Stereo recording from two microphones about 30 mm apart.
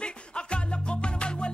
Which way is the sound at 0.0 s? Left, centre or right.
Left.